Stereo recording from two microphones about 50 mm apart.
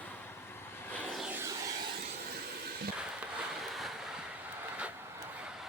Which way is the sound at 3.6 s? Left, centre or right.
Centre.